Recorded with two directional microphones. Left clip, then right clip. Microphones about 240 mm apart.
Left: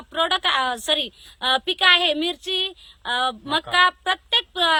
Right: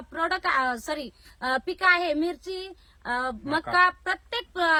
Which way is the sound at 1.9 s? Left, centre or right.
Centre.